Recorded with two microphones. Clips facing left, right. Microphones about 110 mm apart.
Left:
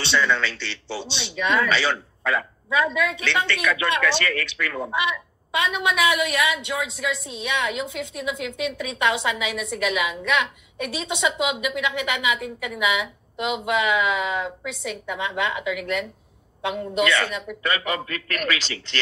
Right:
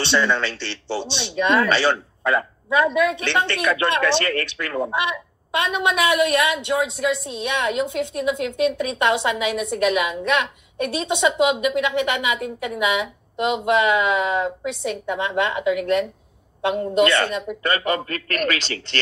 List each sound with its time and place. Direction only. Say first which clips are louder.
0.2 s a man's voice: right 2 dB; 30° right (ahead or behind)